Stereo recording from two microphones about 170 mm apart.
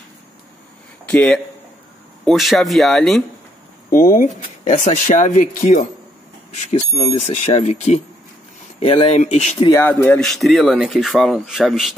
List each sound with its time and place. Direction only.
1.0 s speech: 5° left (ahead or behind)
3.9 s speech: 55° left (ahead or behind)
9.7 s speech: 15° left (ahead or behind)
10.2 s speech: centre (ahead or behind)